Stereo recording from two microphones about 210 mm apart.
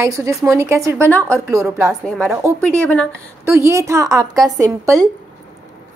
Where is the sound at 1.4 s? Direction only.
10° right (ahead or behind).